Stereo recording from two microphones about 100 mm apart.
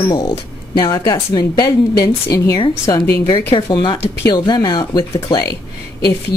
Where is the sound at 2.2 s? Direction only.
35° left (ahead or behind).